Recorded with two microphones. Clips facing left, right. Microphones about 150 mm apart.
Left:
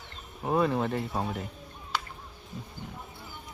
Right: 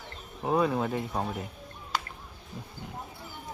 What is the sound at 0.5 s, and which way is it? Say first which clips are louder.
Speech: even; centre (ahead or behind).